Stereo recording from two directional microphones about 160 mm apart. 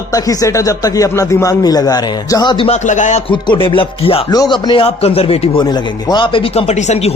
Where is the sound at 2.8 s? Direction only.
50° left (ahead or behind).